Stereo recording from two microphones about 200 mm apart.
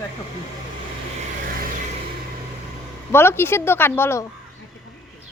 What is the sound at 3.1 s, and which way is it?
Speech, 10° left (ahead or behind).